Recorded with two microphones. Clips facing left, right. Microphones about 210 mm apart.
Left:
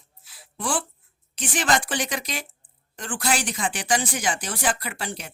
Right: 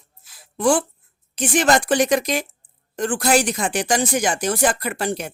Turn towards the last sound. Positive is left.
turn(degrees=-45)  # may be behind; listen again after turning